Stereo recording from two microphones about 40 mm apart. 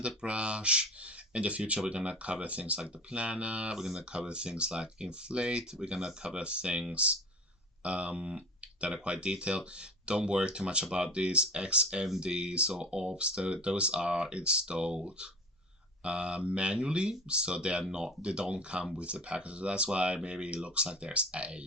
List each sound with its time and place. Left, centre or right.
0.2 s speech: right
3.8 s speech: centre
4.1 s speech: right